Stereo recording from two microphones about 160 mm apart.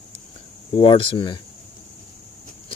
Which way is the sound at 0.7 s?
35° left (ahead or behind).